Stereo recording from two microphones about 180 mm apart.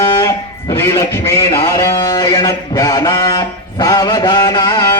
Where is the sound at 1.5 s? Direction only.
20° left (ahead or behind).